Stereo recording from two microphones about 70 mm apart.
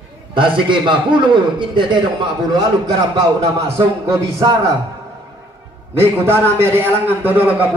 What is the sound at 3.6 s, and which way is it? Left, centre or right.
Speech, right.